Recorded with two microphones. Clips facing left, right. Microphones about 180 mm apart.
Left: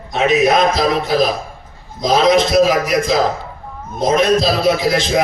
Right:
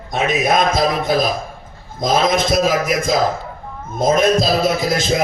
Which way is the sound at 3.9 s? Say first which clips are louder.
Left 1 dB; 50° right (ahead or behind).